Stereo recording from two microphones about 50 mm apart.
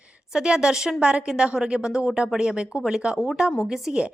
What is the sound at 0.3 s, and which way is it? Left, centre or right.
A woman's voice, centre.